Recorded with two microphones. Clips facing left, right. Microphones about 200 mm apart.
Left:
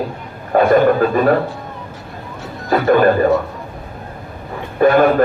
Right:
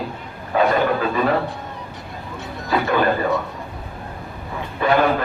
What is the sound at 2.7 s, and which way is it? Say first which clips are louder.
Speech: left 4 dB; 50° left (ahead or behind).